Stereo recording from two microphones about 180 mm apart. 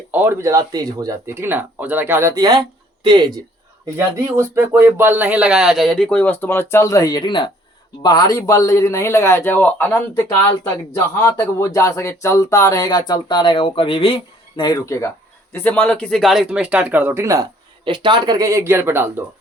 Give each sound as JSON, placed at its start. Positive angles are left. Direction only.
{"t": 0.1, "sound": "speech", "side_deg": -10}